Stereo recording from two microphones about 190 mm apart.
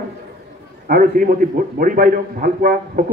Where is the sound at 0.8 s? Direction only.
50° right (ahead or behind).